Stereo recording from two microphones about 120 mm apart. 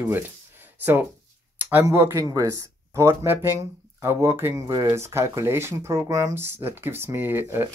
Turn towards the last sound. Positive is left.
turn(degrees=-20)  # may be behind; listen again after turning